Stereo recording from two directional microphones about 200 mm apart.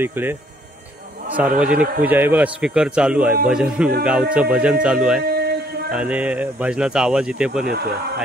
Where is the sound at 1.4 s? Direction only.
5° right (ahead or behind).